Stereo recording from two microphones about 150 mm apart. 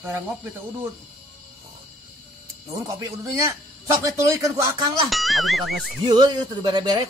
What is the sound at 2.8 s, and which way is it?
A man's voice, 20° right (ahead or behind).